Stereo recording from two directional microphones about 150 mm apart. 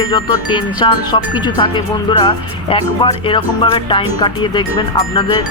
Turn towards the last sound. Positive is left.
turn(degrees=30)  # may be behind; listen again after turning